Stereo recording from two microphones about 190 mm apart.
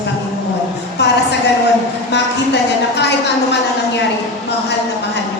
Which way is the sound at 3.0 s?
65° left (ahead or behind).